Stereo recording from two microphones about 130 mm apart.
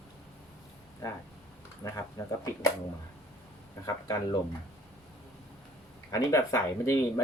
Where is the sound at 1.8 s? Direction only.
25° left (ahead or behind).